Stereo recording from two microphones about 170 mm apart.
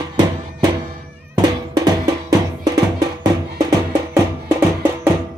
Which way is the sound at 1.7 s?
20° right (ahead or behind).